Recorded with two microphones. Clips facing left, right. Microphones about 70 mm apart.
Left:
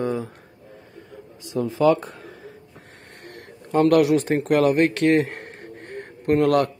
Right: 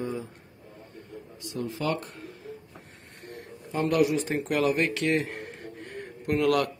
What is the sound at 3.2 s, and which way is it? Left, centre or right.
Speech, left.